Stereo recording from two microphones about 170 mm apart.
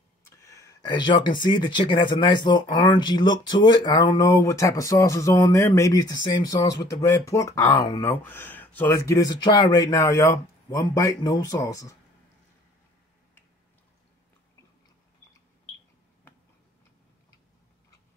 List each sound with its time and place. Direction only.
0.3 s speech: 20° left (ahead or behind)